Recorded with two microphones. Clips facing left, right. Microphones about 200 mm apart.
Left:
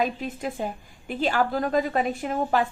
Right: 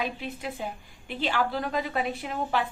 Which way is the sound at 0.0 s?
45° left (ahead or behind).